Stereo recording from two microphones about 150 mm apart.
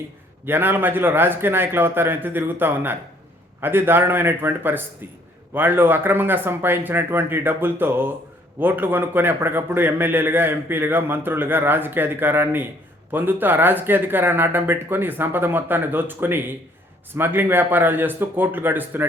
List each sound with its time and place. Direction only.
0.4 s a man's voice: 15° right (ahead or behind)